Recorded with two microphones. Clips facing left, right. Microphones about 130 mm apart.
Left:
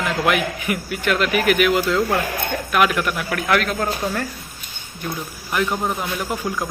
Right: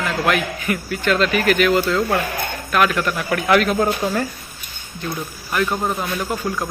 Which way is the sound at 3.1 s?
Centre (ahead or behind).